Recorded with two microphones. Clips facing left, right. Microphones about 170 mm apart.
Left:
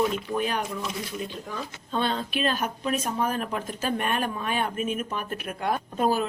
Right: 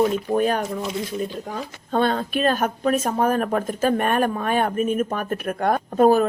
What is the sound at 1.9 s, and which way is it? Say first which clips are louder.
Speech: right 6 dB; 50° right (ahead or behind).